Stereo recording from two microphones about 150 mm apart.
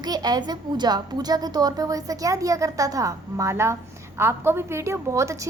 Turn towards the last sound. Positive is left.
turn(degrees=-20)  # may be behind; listen again after turning